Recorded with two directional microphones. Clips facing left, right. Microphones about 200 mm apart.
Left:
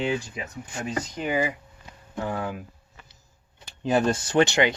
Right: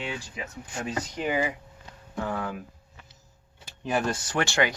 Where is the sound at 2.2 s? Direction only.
15° left (ahead or behind).